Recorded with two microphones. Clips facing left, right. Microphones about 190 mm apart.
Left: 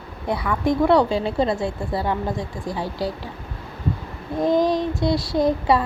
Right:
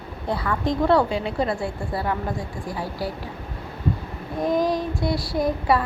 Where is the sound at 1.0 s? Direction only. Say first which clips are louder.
Left 3 dB; 30° left (ahead or behind).